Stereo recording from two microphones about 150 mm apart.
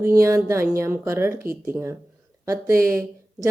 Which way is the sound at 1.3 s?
75° right (ahead or behind).